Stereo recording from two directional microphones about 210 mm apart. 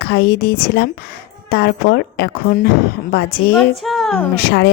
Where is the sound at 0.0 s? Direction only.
50° left (ahead or behind).